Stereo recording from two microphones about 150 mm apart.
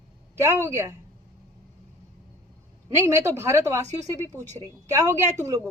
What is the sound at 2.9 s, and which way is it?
A woman's voice, 20° right (ahead or behind).